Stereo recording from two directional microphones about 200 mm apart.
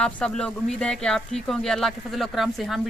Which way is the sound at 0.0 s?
5° left (ahead or behind).